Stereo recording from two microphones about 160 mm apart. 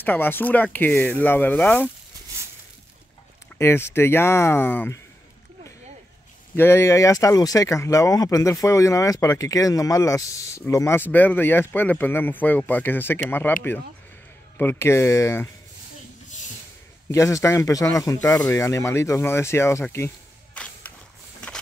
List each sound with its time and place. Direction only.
0.0 s speech: 10° left (ahead or behind)
3.5 s speech: 15° left (ahead or behind)
6.5 s speech: 15° left (ahead or behind)
14.6 s speech: 15° left (ahead or behind)
17.1 s speech: 20° left (ahead or behind)
20.6 s a sound: 5° left (ahead or behind)